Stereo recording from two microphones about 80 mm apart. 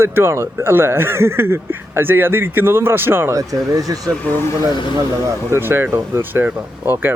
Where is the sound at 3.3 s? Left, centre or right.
Right.